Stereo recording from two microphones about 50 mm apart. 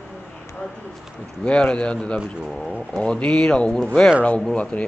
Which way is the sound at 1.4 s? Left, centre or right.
Centre.